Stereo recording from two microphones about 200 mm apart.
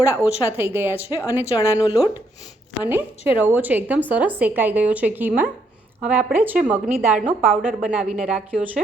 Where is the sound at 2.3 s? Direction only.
35° left (ahead or behind).